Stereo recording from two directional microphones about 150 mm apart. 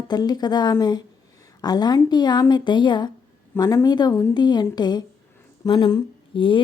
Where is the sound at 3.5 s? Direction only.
20° left (ahead or behind).